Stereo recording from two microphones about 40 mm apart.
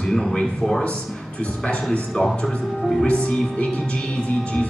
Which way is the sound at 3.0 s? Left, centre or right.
Left.